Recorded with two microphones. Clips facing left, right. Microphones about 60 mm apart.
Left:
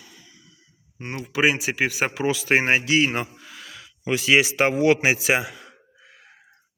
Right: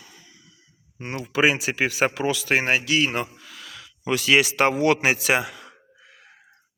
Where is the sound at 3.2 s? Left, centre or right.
Centre.